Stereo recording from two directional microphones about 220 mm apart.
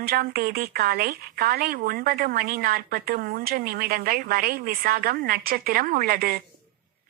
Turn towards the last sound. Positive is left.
turn(degrees=-40)  # may be behind; listen again after turning